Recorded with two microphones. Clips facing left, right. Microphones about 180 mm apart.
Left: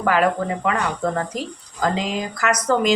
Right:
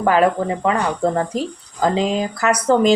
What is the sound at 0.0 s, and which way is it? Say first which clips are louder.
Speech: right 3 dB; 30° right (ahead or behind).